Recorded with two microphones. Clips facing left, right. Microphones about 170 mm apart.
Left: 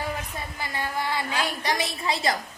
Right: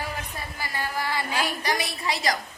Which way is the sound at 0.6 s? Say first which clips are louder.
Even; 25° left (ahead or behind).